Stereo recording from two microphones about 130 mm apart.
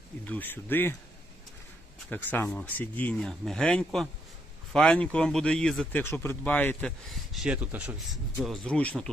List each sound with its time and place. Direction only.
0.3 s speech: 15° left (ahead or behind)
2.0 s speech: 15° left (ahead or behind)
6.0 s speech: 20° left (ahead or behind)
7.1 s speech: 5° right (ahead or behind)
7.9 s speech: centre (ahead or behind)